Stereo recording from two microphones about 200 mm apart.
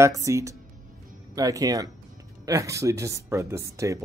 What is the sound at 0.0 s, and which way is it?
Speech, 15° right (ahead or behind).